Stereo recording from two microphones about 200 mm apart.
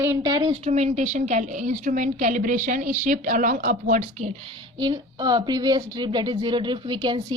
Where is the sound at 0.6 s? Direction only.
35° right (ahead or behind).